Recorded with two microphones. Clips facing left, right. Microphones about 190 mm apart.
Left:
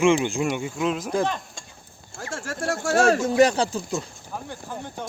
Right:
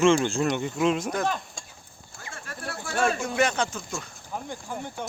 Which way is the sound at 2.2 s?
75° left (ahead or behind).